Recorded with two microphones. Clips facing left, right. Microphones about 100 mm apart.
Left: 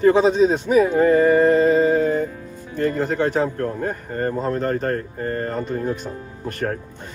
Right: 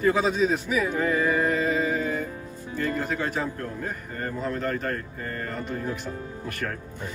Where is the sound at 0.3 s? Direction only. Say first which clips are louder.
Left 7 dB; 35° left (ahead or behind).